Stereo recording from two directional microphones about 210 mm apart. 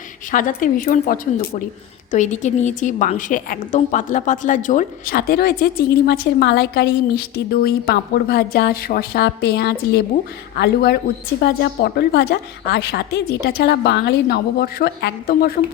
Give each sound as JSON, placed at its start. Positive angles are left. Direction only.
{"t": 0.3, "sound": "a woman's voice", "side_deg": 40}